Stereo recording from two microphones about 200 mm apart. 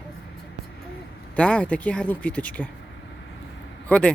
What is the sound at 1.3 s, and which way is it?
Speech, 5° left (ahead or behind).